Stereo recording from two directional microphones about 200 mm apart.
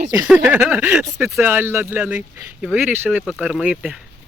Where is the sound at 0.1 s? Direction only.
10° right (ahead or behind).